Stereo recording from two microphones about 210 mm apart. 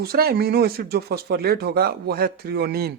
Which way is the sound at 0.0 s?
50° right (ahead or behind).